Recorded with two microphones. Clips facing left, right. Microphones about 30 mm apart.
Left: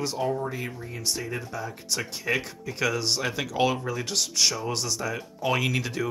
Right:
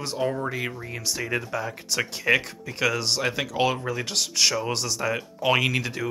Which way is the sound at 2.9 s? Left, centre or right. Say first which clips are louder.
Right 1 dB; right.